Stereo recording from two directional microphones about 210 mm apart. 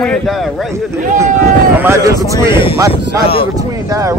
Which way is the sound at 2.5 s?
25° left (ahead or behind).